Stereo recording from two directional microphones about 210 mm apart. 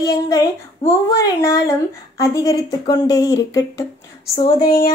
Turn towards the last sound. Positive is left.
turn(degrees=40)  # may be behind; listen again after turning